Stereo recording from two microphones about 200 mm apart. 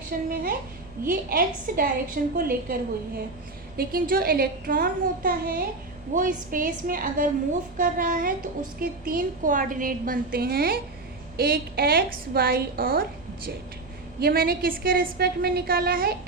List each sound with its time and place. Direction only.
0.1 s a woman's voice: 45° right (ahead or behind)
3.8 s a woman's voice: 45° right (ahead or behind)